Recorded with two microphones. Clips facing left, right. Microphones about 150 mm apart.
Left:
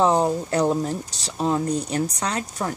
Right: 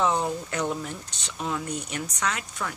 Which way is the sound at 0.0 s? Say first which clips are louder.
Left 6 dB; 35° left (ahead or behind).